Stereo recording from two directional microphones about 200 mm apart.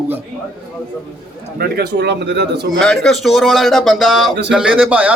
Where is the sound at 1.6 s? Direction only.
55° right (ahead or behind).